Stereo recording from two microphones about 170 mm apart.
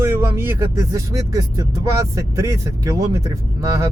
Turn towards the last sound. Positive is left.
turn(degrees=-15)  # may be behind; listen again after turning